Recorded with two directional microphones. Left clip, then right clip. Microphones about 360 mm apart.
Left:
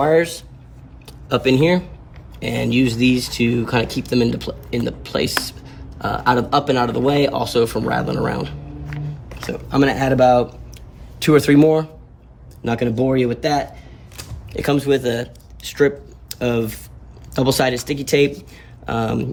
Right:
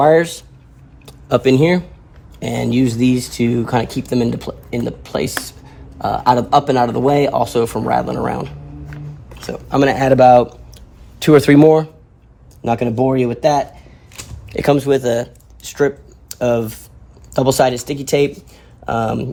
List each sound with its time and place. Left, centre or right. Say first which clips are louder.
0.0 s speech: right 4 dB; centre
14.5 s speech: right 4 dB; centre